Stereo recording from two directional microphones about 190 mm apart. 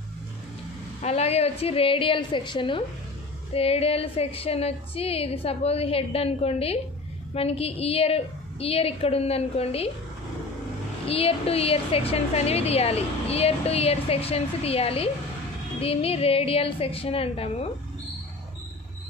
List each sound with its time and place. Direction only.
1.0 s a woman's voice: 35° left (ahead or behind)
11.1 s a woman's voice: 30° left (ahead or behind)